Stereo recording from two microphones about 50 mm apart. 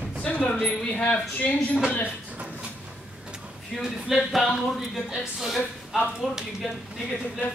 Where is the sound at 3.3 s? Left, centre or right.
Centre.